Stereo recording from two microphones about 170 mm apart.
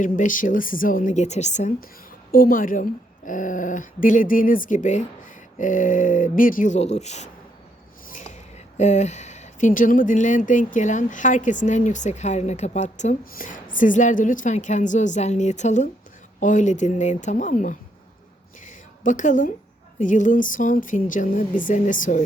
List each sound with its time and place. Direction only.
0.0 s speech: 50° left (ahead or behind)
2.3 s speech: 55° left (ahead or behind)
18.6 s a sound: 50° left (ahead or behind)
20.0 s speech: 50° left (ahead or behind)